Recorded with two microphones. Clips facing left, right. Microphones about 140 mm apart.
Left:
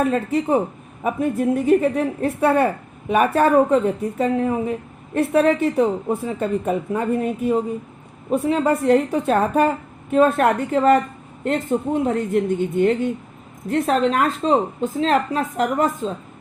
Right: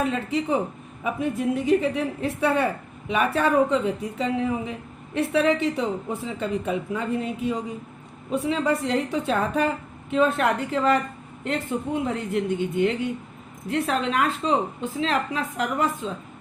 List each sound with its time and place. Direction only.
0.0 s a woman's voice: 50° left (ahead or behind)
12.0 s a woman's voice: 45° left (ahead or behind)